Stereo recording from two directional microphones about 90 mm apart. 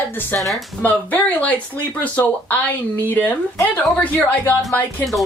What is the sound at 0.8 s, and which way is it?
Speech, 15° left (ahead or behind).